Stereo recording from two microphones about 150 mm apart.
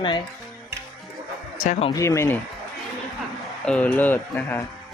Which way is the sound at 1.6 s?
50° left (ahead or behind).